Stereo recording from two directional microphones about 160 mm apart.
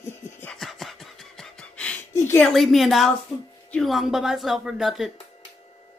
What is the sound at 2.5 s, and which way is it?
Speech, centre (ahead or behind).